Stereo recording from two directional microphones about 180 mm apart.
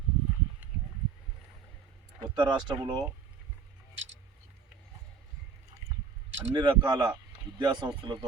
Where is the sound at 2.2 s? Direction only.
25° right (ahead or behind).